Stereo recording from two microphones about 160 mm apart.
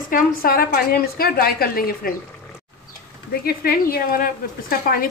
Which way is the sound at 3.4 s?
70° left (ahead or behind).